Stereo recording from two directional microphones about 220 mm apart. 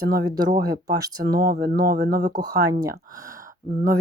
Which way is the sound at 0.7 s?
45° right (ahead or behind).